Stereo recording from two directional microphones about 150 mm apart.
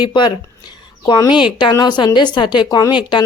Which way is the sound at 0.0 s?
30° left (ahead or behind).